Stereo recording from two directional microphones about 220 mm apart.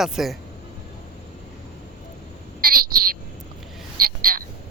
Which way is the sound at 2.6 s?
40° right (ahead or behind).